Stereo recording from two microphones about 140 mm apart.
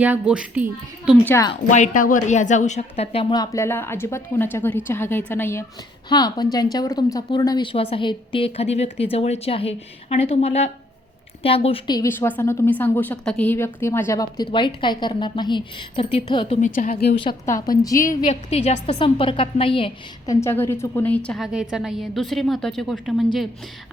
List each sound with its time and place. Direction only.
0.0 s a woman's voice: 10° right (ahead or behind)
1.7 s speech: 65° left (ahead or behind); by 3.3 s 45° left (ahead or behind)
3.3 s a woman's voice: 25° left (ahead or behind)
6.1 s a woman's voice: 30° left (ahead or behind)
11.9 s a woman's voice: 20° left (ahead or behind); by 16.6 s 40° left (ahead or behind)
16.6 s a woman's voice: 65° left (ahead or behind)
17.4 s a woman's voice: 20° left (ahead or behind)
18.3 s a woman's voice: 50° left (ahead or behind)
18.9 s a woman's voice: 35° left (ahead or behind)
20.2 s a woman's voice: 20° left (ahead or behind)
21.4 s a woman's voice: 5° right (ahead or behind)